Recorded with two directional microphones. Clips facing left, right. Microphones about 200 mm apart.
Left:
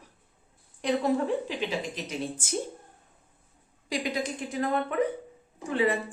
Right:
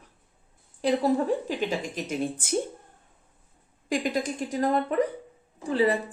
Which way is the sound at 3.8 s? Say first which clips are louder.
Right 3 dB; 50° right (ahead or behind).